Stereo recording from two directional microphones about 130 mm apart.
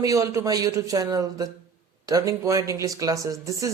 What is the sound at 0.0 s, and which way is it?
Speech, 25° right (ahead or behind).